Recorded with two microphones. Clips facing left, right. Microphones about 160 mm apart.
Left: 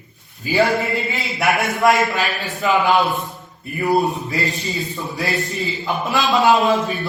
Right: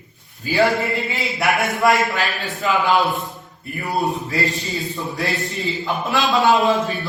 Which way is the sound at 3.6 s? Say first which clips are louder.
Left 6 dB; 20° left (ahead or behind).